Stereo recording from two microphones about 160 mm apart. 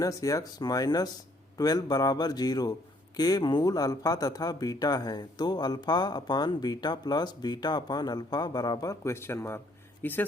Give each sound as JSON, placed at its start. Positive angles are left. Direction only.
{"t": 0.0, "sound": "speech", "side_deg": 20}